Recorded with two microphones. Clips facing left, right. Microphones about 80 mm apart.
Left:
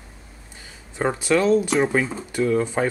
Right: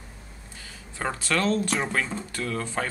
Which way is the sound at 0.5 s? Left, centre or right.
Centre.